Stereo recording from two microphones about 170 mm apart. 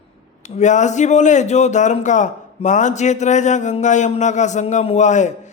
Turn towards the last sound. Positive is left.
turn(degrees=45)  # may be behind; listen again after turning